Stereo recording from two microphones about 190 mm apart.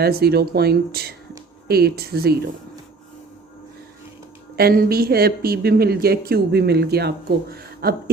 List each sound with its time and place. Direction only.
0.0 s speech: 55° right (ahead or behind)
4.5 s speech: 50° right (ahead or behind)